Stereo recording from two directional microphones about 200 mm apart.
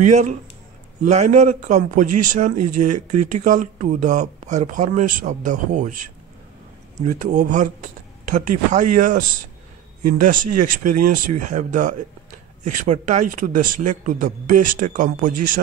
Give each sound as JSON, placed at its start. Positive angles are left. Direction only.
{"t": 1.0, "sound": "a man's voice", "side_deg": -35}
{"t": 7.0, "sound": "a man's voice", "side_deg": -40}